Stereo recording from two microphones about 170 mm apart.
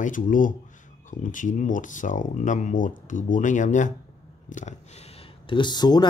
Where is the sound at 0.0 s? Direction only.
50° left (ahead or behind).